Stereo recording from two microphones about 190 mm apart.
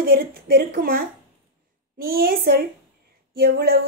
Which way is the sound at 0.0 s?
50° right (ahead or behind).